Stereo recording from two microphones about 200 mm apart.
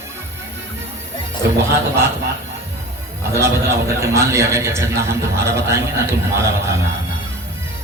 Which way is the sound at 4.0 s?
15° right (ahead or behind).